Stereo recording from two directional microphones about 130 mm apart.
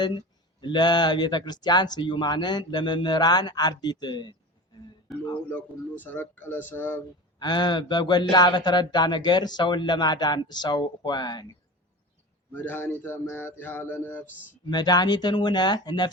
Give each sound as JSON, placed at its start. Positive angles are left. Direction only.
{"t": 0.0, "sound": "speech", "side_deg": 35}
{"t": 5.1, "sound": "speech", "side_deg": 0}
{"t": 5.5, "sound": "speech", "side_deg": 15}
{"t": 7.3, "sound": "speech", "side_deg": 35}
{"t": 12.5, "sound": "speech", "side_deg": 15}
{"t": 14.7, "sound": "speech", "side_deg": 30}